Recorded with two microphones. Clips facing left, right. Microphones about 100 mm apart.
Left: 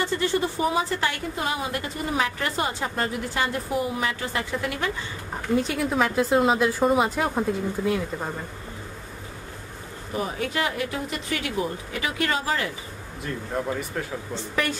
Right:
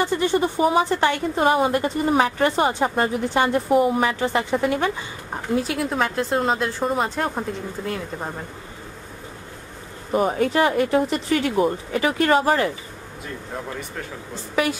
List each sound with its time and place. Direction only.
0.0 s a woman's voice: 20° right (ahead or behind)
1.3 s a woman's voice: 40° right (ahead or behind)
3.7 s speech: 40° right (ahead or behind)
5.6 s speech: centre (ahead or behind)
10.1 s speech: 45° right (ahead or behind)
13.7 s speech: 5° left (ahead or behind)
14.5 s a woman's voice: 10° right (ahead or behind)